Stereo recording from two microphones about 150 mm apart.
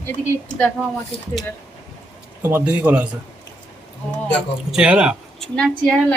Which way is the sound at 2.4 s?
10° right (ahead or behind).